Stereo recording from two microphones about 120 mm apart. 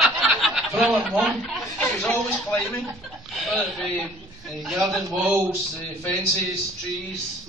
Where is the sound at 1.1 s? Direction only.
Centre (ahead or behind).